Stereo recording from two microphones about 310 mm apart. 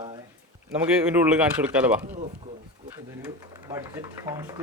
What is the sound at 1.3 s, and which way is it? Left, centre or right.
Speech, centre.